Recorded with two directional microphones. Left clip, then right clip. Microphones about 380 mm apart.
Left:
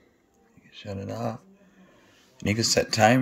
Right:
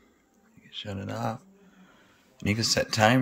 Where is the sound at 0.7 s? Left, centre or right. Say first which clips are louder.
Right 1 dB; centre.